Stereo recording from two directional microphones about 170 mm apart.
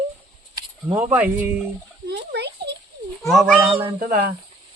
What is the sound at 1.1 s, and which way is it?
Cricket, 10° right (ahead or behind).